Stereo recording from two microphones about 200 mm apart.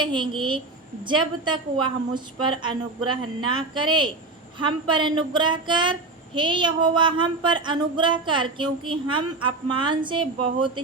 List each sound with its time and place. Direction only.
0.0 s female singing: 25° right (ahead or behind)